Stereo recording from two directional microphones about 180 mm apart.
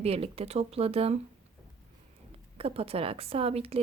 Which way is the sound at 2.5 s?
35° right (ahead or behind).